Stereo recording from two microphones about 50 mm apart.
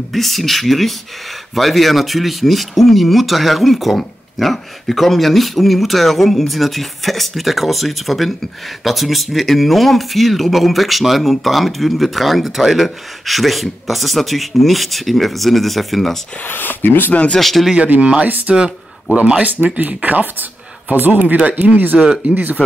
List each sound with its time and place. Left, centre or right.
0.1 s speech: centre
16.4 s speech: left
17.4 s speech: centre
17.8 s speech: right
21.5 s speech: right